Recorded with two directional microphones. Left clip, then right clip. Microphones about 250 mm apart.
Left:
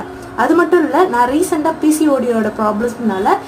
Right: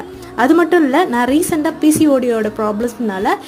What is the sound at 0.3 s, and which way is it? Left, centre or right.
A woman's voice, right.